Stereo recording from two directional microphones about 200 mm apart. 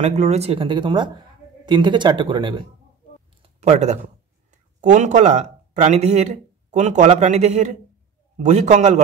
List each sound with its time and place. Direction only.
0.0 s speech: 35° right (ahead or behind)
3.4 s speech: 35° right (ahead or behind)